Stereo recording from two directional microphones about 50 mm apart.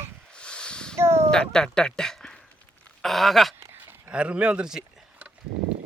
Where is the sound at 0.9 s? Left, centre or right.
Right.